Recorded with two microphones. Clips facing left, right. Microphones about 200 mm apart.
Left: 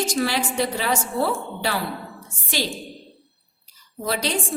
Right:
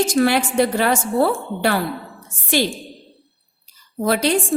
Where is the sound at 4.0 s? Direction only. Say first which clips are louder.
Right 7 dB; 55° right (ahead or behind).